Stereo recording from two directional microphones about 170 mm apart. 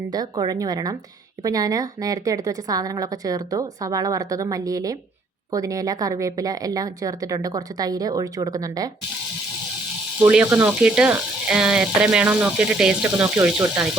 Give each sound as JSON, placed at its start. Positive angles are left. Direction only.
{"t": 0.1, "sound": "a woman's voice", "side_deg": -25}
{"t": 10.2, "sound": "speech", "side_deg": -10}